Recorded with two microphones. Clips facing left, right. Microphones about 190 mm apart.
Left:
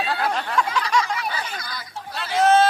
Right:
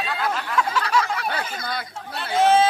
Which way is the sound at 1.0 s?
60° right (ahead or behind).